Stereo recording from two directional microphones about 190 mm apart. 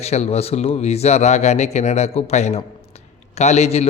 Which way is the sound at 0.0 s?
35° left (ahead or behind).